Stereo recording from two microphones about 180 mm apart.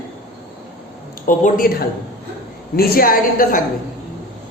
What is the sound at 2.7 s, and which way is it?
Speech, 55° left (ahead or behind).